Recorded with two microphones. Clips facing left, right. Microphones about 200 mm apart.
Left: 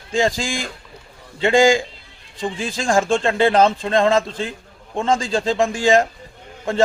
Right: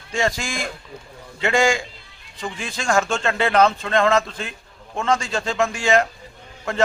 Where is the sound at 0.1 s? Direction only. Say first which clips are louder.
Left 4 dB; 30° left (ahead or behind).